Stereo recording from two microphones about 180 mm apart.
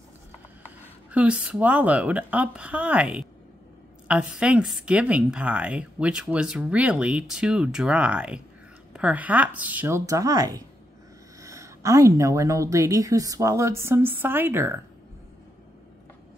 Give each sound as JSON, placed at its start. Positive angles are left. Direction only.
{"t": 1.1, "sound": "a woman's voice", "side_deg": -5}